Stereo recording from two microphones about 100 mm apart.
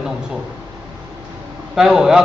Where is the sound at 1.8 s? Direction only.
5° right (ahead or behind).